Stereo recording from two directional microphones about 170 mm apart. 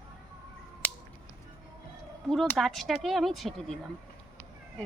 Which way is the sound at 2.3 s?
Centre (ahead or behind).